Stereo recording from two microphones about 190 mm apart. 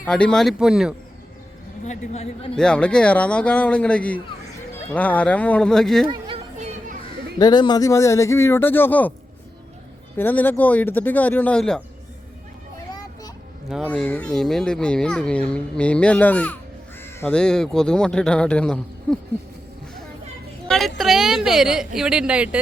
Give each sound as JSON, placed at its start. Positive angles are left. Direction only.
{"t": 0.1, "sound": "speech", "side_deg": 5}
{"t": 1.8, "sound": "a woman's voice", "side_deg": 35}
{"t": 2.6, "sound": "speech", "side_deg": 5}
{"t": 6.1, "sound": "chatter", "side_deg": -25}
{"t": 7.3, "sound": "speech", "side_deg": 20}
{"t": 10.2, "sound": "speech", "side_deg": 10}
{"t": 13.8, "sound": "speech", "side_deg": 10}
{"t": 19.1, "sound": "owl", "side_deg": 5}
{"t": 20.7, "sound": "speech", "side_deg": 0}